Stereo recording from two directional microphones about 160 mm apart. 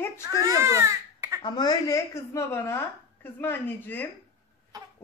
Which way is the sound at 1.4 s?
25° left (ahead or behind).